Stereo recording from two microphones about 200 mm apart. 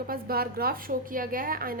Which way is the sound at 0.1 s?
50° right (ahead or behind).